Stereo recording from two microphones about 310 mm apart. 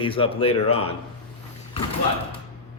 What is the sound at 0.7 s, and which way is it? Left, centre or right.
Speech, left.